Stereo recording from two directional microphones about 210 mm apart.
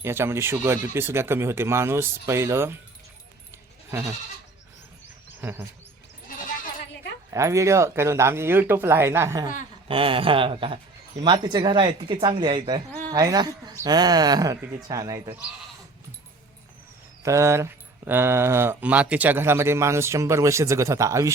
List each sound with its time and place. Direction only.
0.0 s speech: 10° right (ahead or behind)
5.4 s bird: 10° right (ahead or behind)
7.3 s speech: 15° right (ahead or behind)
9.9 s speech: 25° right (ahead or behind)
17.2 s speech: 15° right (ahead or behind)